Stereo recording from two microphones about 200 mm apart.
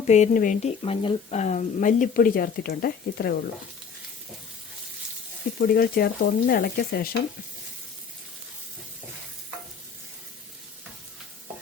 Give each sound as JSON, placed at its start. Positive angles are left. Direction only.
{"t": 0.1, "sound": "speech", "side_deg": 40}
{"t": 5.5, "sound": "speech", "side_deg": 50}